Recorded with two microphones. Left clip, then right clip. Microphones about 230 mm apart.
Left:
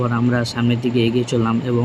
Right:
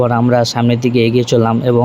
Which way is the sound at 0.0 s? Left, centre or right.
Centre.